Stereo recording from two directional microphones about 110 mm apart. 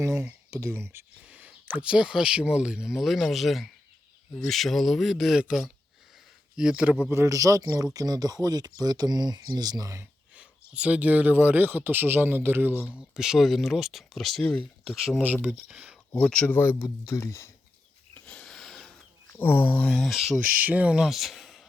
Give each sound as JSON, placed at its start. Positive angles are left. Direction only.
{"t": 0.0, "sound": "speech", "side_deg": -30}
{"t": 1.2, "sound": "speech", "side_deg": -10}
{"t": 7.1, "sound": "speech", "side_deg": -25}
{"t": 10.3, "sound": "speech", "side_deg": -10}
{"t": 13.1, "sound": "speech", "side_deg": -5}
{"t": 16.2, "sound": "speech", "side_deg": 10}
{"t": 16.6, "sound": "speech", "side_deg": 20}
{"t": 18.1, "sound": "a sound", "side_deg": 10}
{"t": 19.3, "sound": "speech", "side_deg": 20}
{"t": 20.4, "sound": "speech", "side_deg": -15}